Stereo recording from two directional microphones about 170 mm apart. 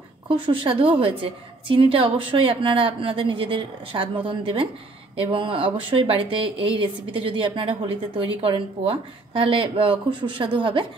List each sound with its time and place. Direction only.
0.5 s a woman's voice: 30° right (ahead or behind)